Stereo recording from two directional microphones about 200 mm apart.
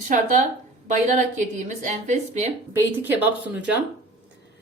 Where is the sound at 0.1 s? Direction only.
40° right (ahead or behind).